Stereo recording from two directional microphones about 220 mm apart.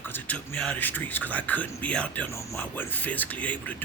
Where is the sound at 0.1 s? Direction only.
5° left (ahead or behind).